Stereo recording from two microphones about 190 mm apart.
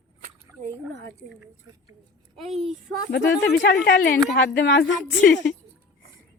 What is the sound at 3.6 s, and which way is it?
Speech, 65° left (ahead or behind).